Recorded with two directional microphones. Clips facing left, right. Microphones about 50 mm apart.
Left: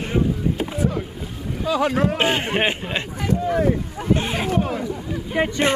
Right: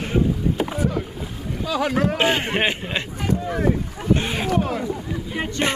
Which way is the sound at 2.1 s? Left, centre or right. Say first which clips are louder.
Even; left.